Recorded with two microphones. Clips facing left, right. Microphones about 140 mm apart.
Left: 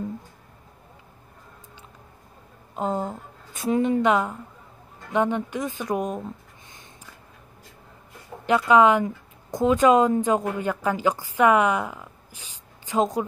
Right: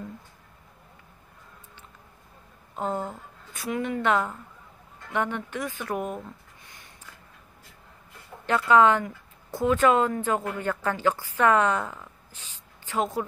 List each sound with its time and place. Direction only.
2.7 s a woman's voice: 15° left (ahead or behind)
8.5 s a woman's voice: 15° left (ahead or behind)